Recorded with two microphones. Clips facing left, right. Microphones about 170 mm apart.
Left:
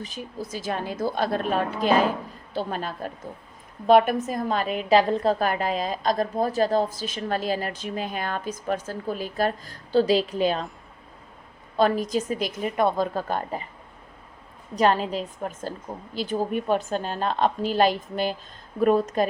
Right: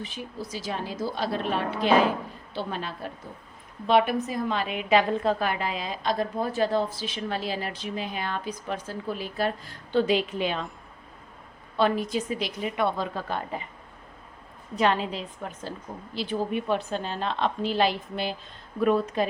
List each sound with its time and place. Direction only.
0.0 s a woman's voice: 40° left (ahead or behind)
11.8 s a woman's voice: 40° left (ahead or behind)
14.8 s a woman's voice: 45° left (ahead or behind)